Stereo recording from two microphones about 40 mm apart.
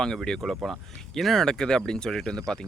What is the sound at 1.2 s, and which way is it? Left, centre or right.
Speech, centre.